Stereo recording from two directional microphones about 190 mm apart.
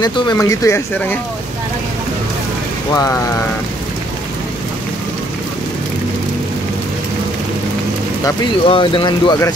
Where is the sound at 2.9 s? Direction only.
15° left (ahead or behind).